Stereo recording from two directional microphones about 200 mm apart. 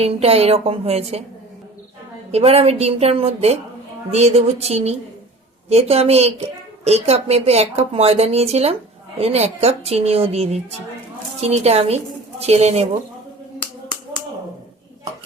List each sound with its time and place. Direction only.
0.0 s a woman's voice: 30° right (ahead or behind)
2.3 s a woman's voice: 30° right (ahead or behind)